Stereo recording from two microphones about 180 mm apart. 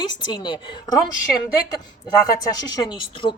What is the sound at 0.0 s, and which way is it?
Speech, 25° left (ahead or behind).